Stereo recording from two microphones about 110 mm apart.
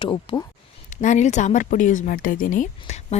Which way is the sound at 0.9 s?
90° left.